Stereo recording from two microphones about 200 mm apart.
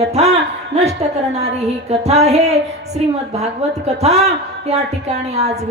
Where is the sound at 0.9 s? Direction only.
35° right (ahead or behind).